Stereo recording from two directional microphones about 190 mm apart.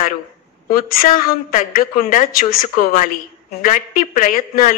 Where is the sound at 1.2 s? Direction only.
45° left (ahead or behind).